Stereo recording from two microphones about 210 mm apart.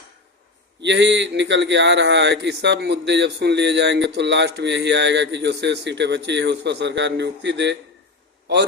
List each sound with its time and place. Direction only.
0.8 s speech: 55° right (ahead or behind)